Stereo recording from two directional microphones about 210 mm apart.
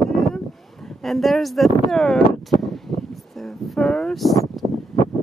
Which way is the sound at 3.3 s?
Centre (ahead or behind).